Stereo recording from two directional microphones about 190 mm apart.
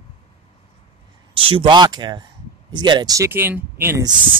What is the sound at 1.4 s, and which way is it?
Speech, 25° right (ahead or behind).